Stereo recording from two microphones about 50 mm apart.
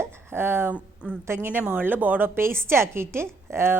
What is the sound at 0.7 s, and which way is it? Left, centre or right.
Speech, right.